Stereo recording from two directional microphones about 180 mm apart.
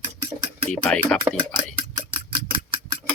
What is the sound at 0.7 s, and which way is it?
Speech, 5° left (ahead or behind).